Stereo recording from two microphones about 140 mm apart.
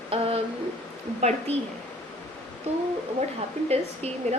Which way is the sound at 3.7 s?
50° right (ahead or behind).